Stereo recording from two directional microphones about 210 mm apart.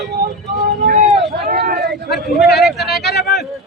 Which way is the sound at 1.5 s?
45° right (ahead or behind).